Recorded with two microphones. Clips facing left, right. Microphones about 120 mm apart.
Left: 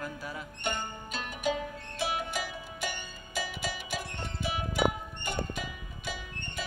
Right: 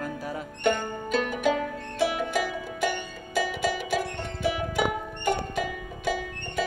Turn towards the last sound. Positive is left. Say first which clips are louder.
# right 11 dB
turn(degrees=-90)